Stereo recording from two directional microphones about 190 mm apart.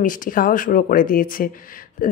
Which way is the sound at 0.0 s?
45° left (ahead or behind).